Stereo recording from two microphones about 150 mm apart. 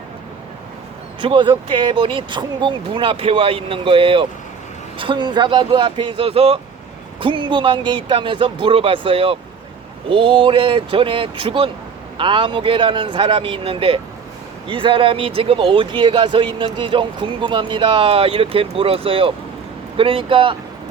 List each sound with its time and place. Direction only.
1.2 s speech: 35° right (ahead or behind)